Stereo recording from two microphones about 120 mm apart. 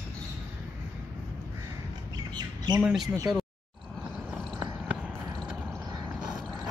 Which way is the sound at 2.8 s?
5° right (ahead or behind).